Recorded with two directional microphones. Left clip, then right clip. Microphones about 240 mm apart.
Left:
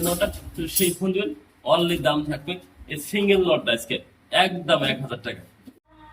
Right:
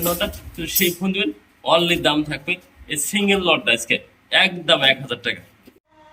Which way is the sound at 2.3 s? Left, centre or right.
Centre.